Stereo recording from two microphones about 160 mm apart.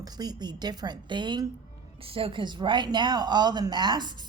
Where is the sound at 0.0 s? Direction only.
25° right (ahead or behind).